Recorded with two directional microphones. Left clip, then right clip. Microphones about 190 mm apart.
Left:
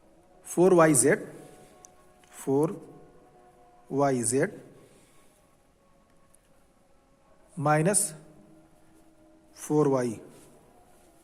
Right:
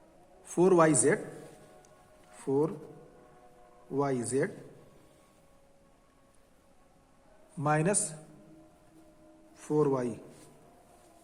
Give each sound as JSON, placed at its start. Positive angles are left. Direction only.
{"t": 0.4, "sound": "a man's voice", "side_deg": 30}
{"t": 2.3, "sound": "speech", "side_deg": 45}
{"t": 3.9, "sound": "speech", "side_deg": 45}
{"t": 7.6, "sound": "a man's voice", "side_deg": 35}
{"t": 9.6, "sound": "speech", "side_deg": 45}